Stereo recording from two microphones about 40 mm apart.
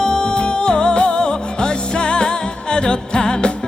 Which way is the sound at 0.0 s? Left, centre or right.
Left.